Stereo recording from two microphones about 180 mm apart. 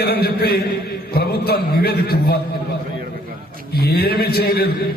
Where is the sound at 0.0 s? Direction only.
60° left (ahead or behind).